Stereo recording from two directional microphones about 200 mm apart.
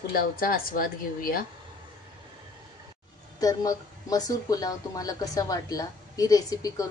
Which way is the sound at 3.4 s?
20° left (ahead or behind).